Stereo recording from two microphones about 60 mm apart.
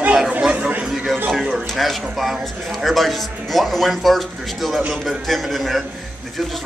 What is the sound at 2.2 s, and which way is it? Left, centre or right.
A man's voice, centre.